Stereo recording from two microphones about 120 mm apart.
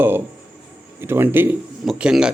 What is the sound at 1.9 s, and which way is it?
Speech, 5° right (ahead or behind).